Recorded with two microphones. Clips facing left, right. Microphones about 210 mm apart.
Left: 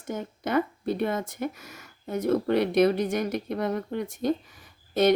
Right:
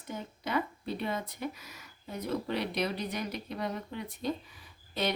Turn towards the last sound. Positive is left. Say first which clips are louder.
# left 11 dB
turn(degrees=45)  # may be behind; listen again after turning